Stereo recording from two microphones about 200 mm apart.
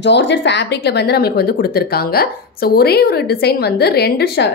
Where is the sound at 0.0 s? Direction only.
60° left (ahead or behind).